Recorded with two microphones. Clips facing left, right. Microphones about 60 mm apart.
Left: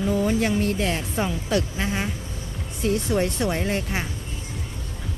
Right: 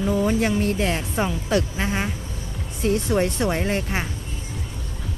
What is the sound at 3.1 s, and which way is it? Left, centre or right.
Speech, right.